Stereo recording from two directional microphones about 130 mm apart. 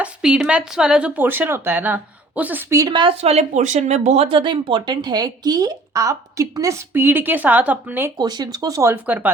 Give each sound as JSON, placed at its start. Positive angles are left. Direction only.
{"t": 0.0, "sound": "speech", "side_deg": -5}
{"t": 3.0, "sound": "speech", "side_deg": -50}
{"t": 8.2, "sound": "speech", "side_deg": -30}